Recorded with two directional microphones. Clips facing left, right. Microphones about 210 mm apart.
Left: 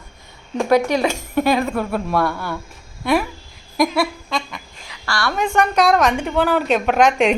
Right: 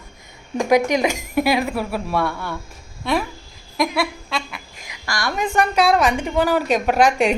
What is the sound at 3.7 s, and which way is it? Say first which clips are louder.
Speech: left 3 dB; centre (ahead or behind).